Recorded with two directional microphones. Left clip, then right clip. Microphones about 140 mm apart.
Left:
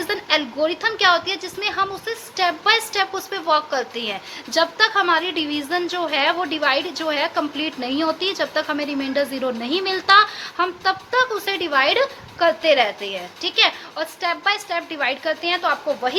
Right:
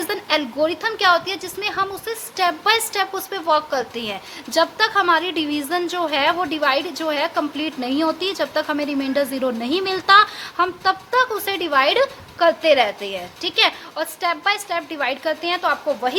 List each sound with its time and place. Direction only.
0.0 s a woman's voice: 30° right (ahead or behind)